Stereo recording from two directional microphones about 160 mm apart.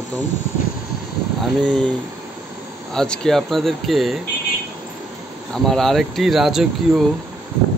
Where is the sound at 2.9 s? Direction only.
5° left (ahead or behind).